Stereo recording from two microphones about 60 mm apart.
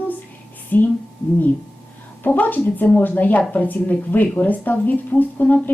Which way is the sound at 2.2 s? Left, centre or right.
Left.